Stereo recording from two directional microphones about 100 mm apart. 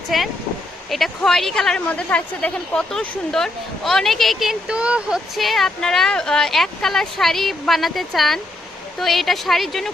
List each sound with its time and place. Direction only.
0.1 s speech: centre (ahead or behind)